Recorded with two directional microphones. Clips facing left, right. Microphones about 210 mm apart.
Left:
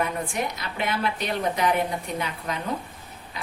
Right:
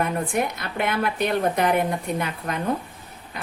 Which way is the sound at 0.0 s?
55° right (ahead or behind).